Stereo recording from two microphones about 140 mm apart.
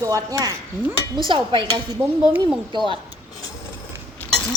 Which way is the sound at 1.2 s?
35° right (ahead or behind).